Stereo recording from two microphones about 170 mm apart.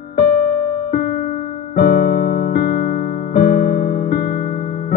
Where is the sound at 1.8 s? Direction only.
60° left (ahead or behind).